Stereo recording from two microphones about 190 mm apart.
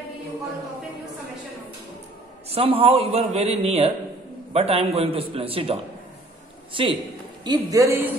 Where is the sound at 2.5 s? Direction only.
30° right (ahead or behind).